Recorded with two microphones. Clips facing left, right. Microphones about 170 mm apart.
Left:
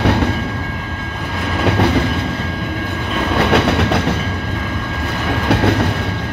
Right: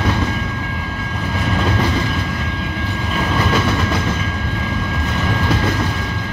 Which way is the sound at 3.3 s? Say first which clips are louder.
Left 5 dB; 70° left (ahead or behind).